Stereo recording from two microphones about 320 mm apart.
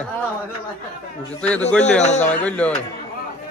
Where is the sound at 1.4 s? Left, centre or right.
Centre.